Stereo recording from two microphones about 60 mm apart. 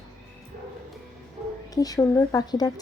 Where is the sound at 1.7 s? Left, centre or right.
Left.